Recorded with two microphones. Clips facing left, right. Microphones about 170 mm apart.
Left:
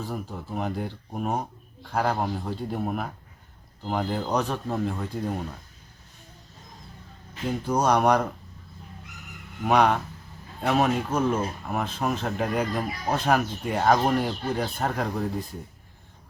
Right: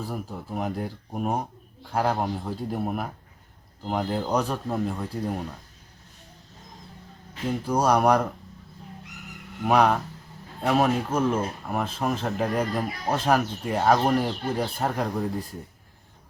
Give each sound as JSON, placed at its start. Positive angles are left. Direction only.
{"t": 0.0, "sound": "a man's voice", "side_deg": -5}
{"t": 7.4, "sound": "a man's voice", "side_deg": -5}
{"t": 9.6, "sound": "speech", "side_deg": 0}